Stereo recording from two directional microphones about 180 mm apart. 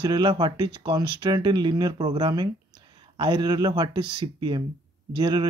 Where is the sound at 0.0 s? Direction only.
25° right (ahead or behind).